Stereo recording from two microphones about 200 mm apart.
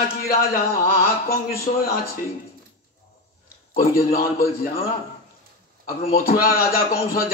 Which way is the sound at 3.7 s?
50° left (ahead or behind).